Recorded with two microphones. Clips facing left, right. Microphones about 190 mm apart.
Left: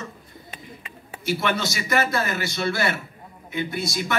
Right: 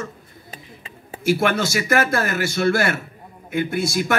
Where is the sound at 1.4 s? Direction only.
50° right (ahead or behind).